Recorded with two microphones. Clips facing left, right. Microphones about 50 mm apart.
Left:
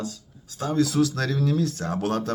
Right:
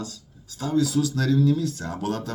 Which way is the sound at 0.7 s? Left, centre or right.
Left.